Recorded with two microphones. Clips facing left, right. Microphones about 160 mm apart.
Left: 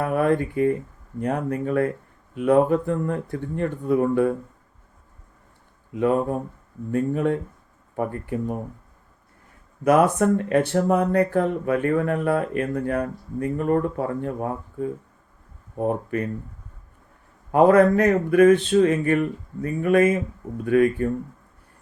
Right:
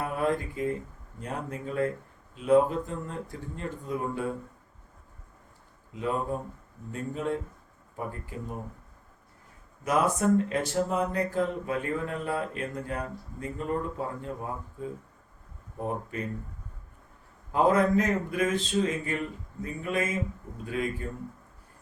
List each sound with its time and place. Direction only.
0.0 s speech: 65° left (ahead or behind)
5.9 s speech: 55° left (ahead or behind)
9.8 s speech: 60° left (ahead or behind)
17.5 s speech: 60° left (ahead or behind)